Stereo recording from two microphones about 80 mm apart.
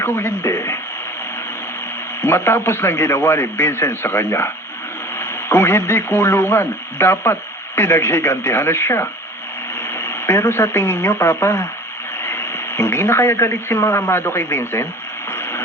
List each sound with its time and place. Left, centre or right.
0.0 s radio: left
2.2 s a man's voice: left
15.3 s radio: left